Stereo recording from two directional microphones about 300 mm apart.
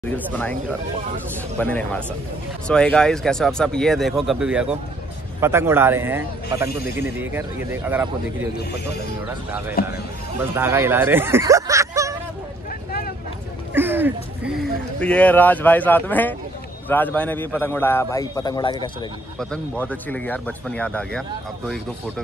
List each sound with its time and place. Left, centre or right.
0.1 s speech: centre
1.6 s speech: centre
9.8 s speech: left
10.4 s speech: centre
13.7 s a man's voice: centre
19.5 s speech: centre